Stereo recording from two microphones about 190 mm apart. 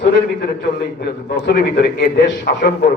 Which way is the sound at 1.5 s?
55° left (ahead or behind).